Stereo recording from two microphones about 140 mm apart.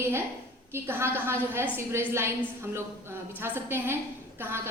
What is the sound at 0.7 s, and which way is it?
A woman's voice, 15° right (ahead or behind).